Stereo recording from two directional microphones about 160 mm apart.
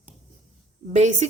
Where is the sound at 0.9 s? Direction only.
45° right (ahead or behind).